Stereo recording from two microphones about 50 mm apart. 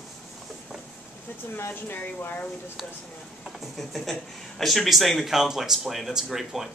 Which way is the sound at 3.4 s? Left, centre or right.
Centre.